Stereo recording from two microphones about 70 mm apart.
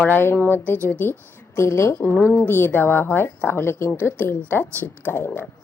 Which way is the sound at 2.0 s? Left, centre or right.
Left.